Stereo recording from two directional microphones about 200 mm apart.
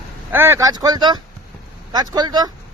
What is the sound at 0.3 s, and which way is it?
Speech, 10° right (ahead or behind).